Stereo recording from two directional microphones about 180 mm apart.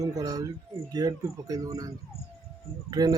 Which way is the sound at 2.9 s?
20° right (ahead or behind).